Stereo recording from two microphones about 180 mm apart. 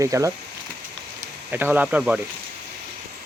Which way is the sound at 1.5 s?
10° right (ahead or behind).